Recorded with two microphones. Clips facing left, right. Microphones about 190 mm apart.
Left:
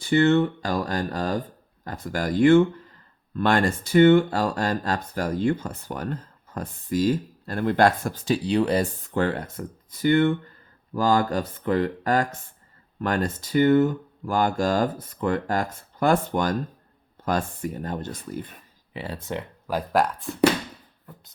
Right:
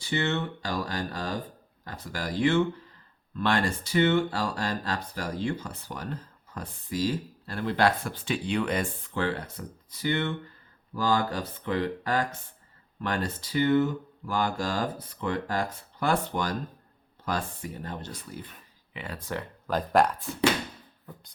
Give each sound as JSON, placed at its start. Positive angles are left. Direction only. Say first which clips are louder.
{"t": 0.0, "sound": "speech", "louder": "left 10 dB", "side_deg": 50}
{"t": 18.9, "sound": "speech", "louder": "left 4 dB", "side_deg": 30}
{"t": 19.6, "sound": "speech", "louder": "even", "side_deg": 5}